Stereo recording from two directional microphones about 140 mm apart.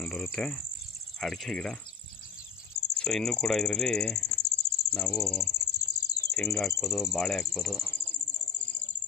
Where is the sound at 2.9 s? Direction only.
5° left (ahead or behind).